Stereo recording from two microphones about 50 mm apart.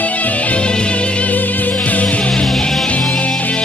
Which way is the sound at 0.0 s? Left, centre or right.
Left.